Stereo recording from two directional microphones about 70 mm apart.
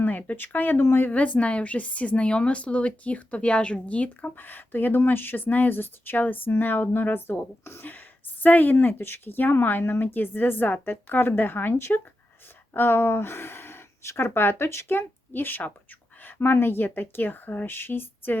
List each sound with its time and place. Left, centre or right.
0.0 s speech: left
1.1 s speech: centre